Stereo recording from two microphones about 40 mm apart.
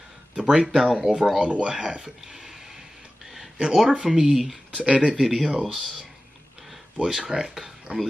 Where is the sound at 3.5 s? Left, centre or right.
Right.